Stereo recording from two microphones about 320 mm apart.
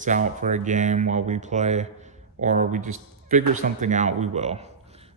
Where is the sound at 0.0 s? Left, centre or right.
Right.